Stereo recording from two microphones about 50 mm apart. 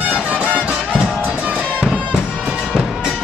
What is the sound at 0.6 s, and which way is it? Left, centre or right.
Music, right.